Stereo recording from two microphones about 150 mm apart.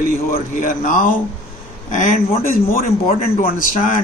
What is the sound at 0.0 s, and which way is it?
A man's voice, 65° left (ahead or behind).